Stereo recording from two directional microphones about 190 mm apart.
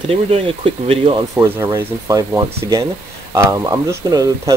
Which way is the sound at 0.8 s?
30° right (ahead or behind).